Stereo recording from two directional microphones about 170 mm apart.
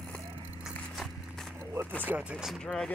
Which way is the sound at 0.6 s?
Centre (ahead or behind).